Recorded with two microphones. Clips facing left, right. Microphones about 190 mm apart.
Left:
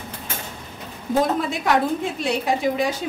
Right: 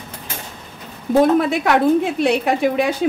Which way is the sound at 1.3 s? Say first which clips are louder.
Right 5 dB; 65° right (ahead or behind).